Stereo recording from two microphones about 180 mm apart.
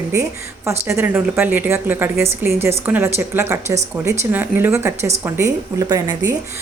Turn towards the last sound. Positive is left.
turn(degrees=-20)  # may be behind; listen again after turning